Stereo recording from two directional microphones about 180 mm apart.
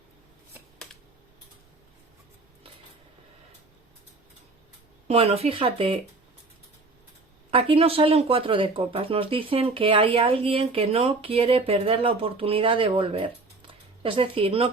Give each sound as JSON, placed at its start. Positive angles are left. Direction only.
{"t": 5.0, "sound": "speech", "side_deg": -30}
{"t": 7.5, "sound": "speech", "side_deg": -30}